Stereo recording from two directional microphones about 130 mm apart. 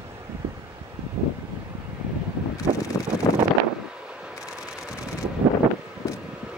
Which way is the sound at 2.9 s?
30° left (ahead or behind).